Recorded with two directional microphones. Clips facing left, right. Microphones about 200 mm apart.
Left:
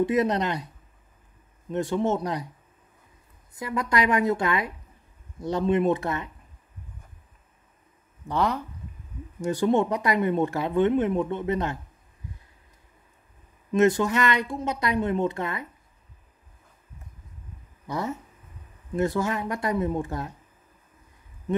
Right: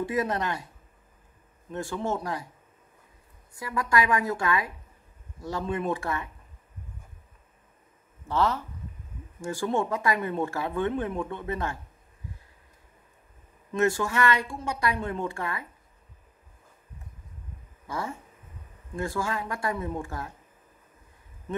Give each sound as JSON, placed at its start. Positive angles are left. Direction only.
{"t": 0.0, "sound": "speech", "side_deg": 20}
{"t": 1.7, "sound": "speech", "side_deg": 20}
{"t": 3.5, "sound": "speech", "side_deg": 20}
{"t": 8.3, "sound": "speech", "side_deg": 15}
{"t": 13.7, "sound": "speech", "side_deg": 20}
{"t": 17.8, "sound": "speech", "side_deg": 15}